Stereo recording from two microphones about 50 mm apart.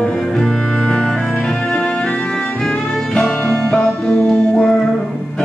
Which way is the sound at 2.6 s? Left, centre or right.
Centre.